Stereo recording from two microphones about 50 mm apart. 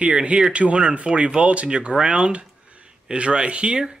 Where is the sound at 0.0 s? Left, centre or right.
Right.